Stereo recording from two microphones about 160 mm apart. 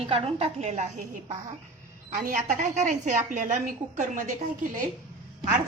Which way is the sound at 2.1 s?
55° right (ahead or behind).